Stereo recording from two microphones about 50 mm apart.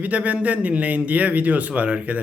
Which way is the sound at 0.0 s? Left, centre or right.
Right.